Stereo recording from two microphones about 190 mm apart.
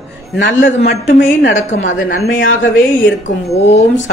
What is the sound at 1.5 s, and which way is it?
Speech, 45° left (ahead or behind).